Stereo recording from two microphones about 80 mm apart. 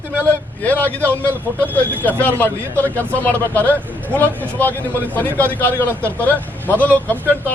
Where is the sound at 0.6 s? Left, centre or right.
Left.